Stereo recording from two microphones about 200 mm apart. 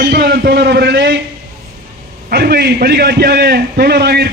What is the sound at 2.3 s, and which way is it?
A man's voice, 50° right (ahead or behind).